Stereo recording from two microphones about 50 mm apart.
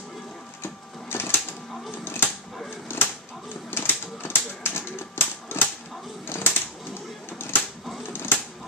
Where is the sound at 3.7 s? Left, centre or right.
Left.